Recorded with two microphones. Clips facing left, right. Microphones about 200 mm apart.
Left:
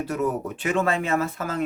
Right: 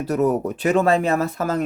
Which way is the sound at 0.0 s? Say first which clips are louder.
Right 6 dB; 40° right (ahead or behind).